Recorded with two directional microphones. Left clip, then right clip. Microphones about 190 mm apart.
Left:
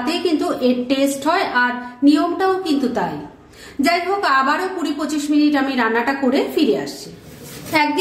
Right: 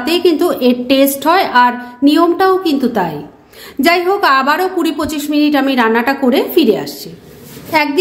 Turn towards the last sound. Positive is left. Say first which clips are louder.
# right 4 dB
turn(degrees=-30)  # may be behind; listen again after turning